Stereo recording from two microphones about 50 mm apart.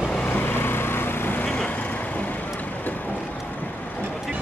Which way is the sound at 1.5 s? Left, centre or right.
Centre.